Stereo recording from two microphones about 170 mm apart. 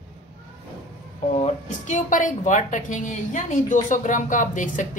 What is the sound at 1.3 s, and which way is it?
A woman's voice, 45° left (ahead or behind).